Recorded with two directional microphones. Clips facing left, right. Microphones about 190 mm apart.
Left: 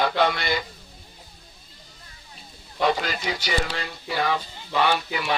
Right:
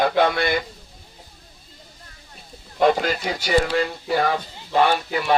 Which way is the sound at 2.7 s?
50° right (ahead or behind).